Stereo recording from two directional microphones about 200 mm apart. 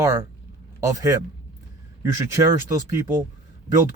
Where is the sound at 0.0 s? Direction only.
15° right (ahead or behind).